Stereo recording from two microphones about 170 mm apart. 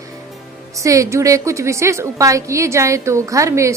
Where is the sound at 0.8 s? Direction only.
20° right (ahead or behind).